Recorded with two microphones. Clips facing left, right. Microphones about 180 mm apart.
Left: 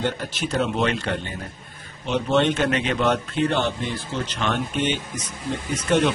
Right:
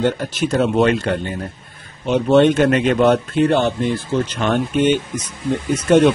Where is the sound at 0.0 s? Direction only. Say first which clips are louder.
Right 7 dB; 45° right (ahead or behind).